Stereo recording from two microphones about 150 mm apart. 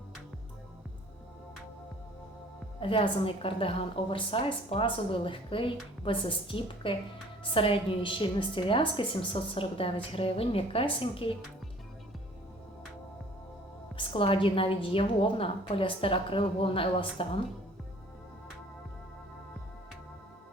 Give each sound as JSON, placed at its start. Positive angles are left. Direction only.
{"t": 2.8, "sound": "a woman's voice", "side_deg": 35}
{"t": 13.9, "sound": "a woman's voice", "side_deg": 35}